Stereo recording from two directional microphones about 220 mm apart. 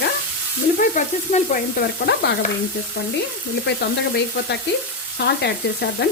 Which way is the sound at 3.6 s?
50° left (ahead or behind).